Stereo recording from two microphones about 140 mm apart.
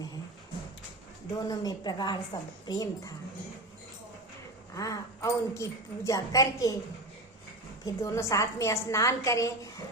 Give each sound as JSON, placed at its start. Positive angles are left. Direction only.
{"t": 1.4, "sound": "a woman's voice", "side_deg": 30}
{"t": 4.7, "sound": "a woman's voice", "side_deg": 25}
{"t": 7.9, "sound": "a woman's voice", "side_deg": 20}